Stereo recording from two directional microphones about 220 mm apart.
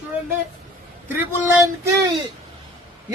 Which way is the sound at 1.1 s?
10° right (ahead or behind).